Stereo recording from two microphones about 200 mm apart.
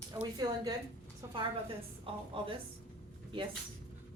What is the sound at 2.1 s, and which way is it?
Speech, 25° right (ahead or behind).